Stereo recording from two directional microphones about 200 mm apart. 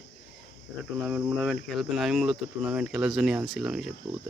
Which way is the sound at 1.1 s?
5° right (ahead or behind).